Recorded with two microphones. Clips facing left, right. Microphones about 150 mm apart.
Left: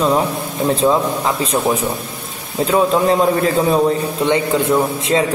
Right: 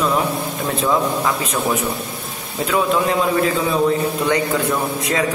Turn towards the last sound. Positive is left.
turn(degrees=25)  # may be behind; listen again after turning